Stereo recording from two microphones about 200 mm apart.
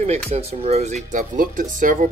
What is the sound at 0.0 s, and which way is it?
Speech, 30° right (ahead or behind).